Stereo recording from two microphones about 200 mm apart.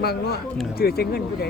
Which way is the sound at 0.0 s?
50° left (ahead or behind).